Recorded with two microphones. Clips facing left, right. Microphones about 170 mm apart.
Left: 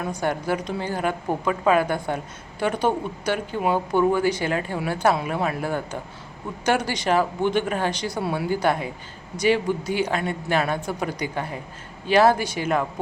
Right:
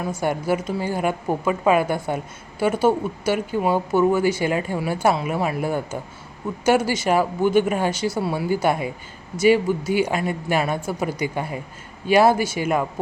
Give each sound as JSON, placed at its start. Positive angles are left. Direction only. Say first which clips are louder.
{"t": 0.0, "sound": "a woman's voice", "louder": "right 2 dB", "side_deg": -5}